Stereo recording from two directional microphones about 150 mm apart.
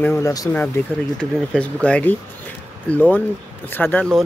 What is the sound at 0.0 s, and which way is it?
Speech, 20° left (ahead or behind).